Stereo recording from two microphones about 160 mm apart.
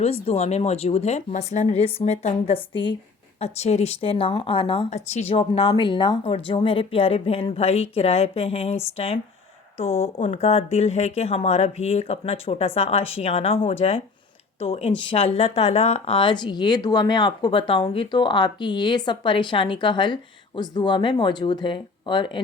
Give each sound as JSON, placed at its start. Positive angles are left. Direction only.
{"t": 0.0, "sound": "speech", "side_deg": 40}
{"t": 4.9, "sound": "speech", "side_deg": 45}